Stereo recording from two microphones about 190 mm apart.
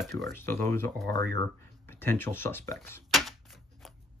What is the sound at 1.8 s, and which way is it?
Speech, 10° left (ahead or behind).